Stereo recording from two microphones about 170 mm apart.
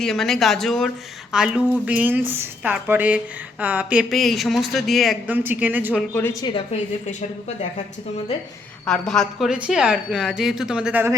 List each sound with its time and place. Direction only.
0.0 s a woman's voice: centre (ahead or behind)
6.0 s speech: 10° left (ahead or behind)
6.4 s a woman's voice: 35° left (ahead or behind)
8.9 s a woman's voice: 5° left (ahead or behind)